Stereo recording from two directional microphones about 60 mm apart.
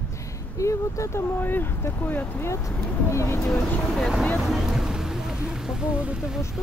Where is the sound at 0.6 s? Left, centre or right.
Left.